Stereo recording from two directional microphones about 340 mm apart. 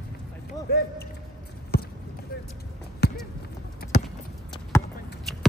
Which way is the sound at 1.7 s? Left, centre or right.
Left.